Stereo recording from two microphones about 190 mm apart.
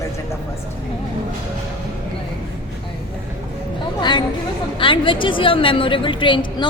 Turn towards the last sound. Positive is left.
turn(degrees=25)  # may be behind; listen again after turning